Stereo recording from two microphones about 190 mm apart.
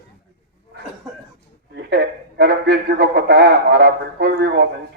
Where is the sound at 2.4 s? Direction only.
55° right (ahead or behind).